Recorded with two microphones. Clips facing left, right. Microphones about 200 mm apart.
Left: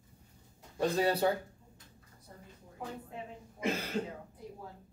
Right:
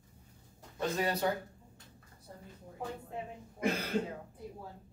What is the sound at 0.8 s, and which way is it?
Speech, 30° left (ahead or behind).